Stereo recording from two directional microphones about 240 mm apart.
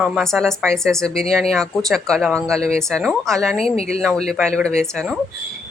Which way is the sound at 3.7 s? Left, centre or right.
Left.